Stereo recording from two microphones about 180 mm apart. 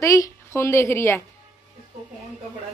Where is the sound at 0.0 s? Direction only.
15° left (ahead or behind).